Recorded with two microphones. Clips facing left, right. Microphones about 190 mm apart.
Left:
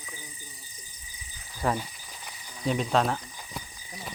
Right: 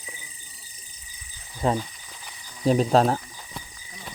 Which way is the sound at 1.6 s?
20° right (ahead or behind).